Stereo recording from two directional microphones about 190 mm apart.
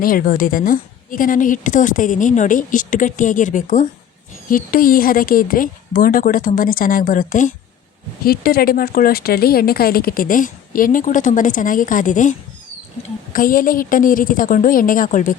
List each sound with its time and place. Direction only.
0.0 s a woman's voice: 50° left (ahead or behind)